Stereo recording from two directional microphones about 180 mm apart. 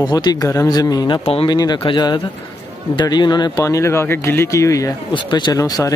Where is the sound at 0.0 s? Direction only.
20° left (ahead or behind).